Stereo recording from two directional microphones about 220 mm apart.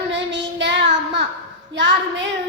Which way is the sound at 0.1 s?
55° right (ahead or behind).